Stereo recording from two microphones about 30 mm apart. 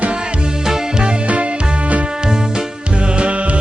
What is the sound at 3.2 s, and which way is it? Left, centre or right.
Music, right.